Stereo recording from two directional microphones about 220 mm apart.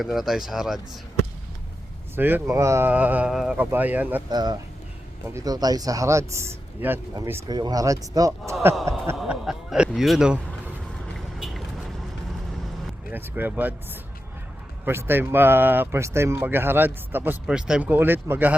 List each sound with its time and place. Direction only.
0.0 s speech: centre (ahead or behind)
2.1 s speech: 10° right (ahead or behind)
4.3 s speech: 20° right (ahead or behind)
9.1 s speech: centre (ahead or behind)
11.3 s vehicle: centre (ahead or behind)
13.1 s speech: 10° right (ahead or behind)